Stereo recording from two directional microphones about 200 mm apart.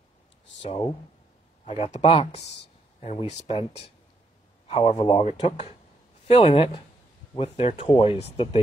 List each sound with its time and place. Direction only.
0.6 s speech: 30° left (ahead or behind)